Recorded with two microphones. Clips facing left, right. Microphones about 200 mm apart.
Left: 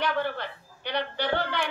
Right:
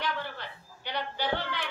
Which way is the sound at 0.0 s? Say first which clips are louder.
Left 7 dB; 60° left (ahead or behind).